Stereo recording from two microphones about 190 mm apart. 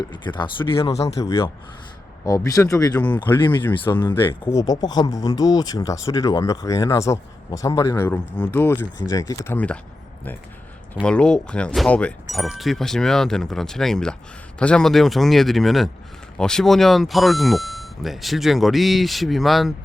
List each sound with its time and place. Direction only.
0.0 s speech: 25° left (ahead or behind)
2.2 s speech: 20° left (ahead or behind)
11.0 s speech: 5° left (ahead or behind)